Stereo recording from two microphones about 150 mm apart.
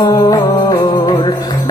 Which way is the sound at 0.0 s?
30° left (ahead or behind).